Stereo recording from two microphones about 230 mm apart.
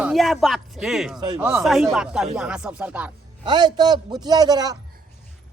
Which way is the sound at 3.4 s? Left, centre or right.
Centre.